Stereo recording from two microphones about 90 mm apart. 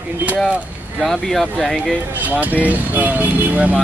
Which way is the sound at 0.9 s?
5° left (ahead or behind).